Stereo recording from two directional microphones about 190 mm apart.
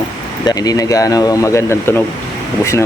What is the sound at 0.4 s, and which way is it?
Speech, 20° left (ahead or behind).